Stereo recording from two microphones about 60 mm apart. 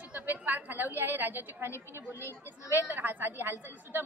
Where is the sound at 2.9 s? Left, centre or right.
Right.